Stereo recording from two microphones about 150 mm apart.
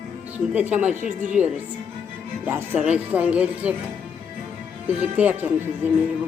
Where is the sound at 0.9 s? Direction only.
60° right (ahead or behind).